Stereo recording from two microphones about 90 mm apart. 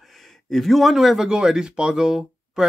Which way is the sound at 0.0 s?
Centre (ahead or behind).